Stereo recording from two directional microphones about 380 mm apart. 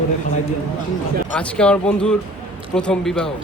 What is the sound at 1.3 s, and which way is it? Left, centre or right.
Speech, centre.